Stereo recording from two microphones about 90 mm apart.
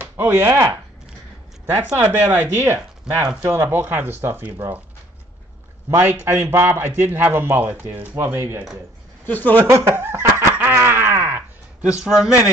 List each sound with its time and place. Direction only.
0.0 s speech: 25° right (ahead or behind)
2.0 s a man's voice: 30° right (ahead or behind)
5.9 s a man's voice: 25° right (ahead or behind)
9.2 s speech: 20° left (ahead or behind)
9.6 s snicker: 30° right (ahead or behind)
11.9 s a man's voice: 5° right (ahead or behind)